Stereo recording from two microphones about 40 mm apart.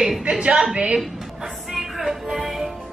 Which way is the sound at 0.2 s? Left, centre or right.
Right.